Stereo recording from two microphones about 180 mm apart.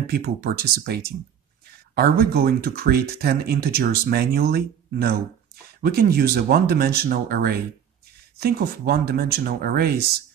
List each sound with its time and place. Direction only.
0.0 s speech: 60° right (ahead or behind)